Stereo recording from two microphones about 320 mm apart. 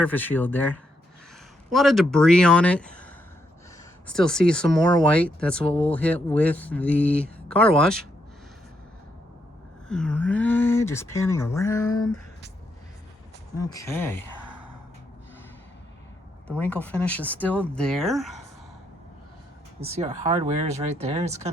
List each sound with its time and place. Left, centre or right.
0.0 s speech: centre
9.9 s speech: centre
13.6 s speech: centre
16.5 s speech: centre
19.8 s speech: centre